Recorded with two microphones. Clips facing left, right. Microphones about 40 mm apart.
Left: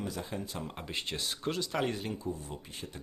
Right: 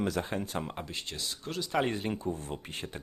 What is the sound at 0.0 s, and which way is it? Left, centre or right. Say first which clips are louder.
Speech: right 7 dB; right.